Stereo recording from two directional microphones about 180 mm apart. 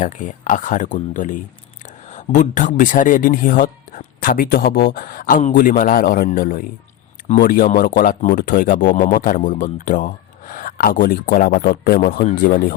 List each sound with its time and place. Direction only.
0.0 s speech: 45° left (ahead or behind)